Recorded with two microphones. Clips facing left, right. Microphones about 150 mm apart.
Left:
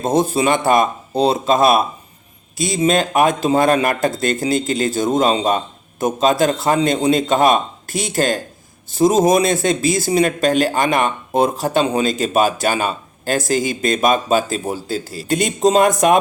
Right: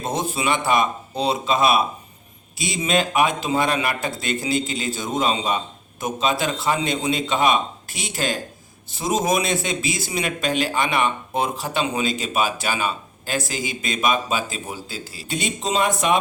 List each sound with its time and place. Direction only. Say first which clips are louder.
0.0 s speech: left 8 dB; 40° left (ahead or behind)